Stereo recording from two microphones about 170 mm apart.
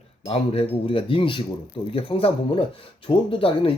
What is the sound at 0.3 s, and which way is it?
Speech, 35° left (ahead or behind).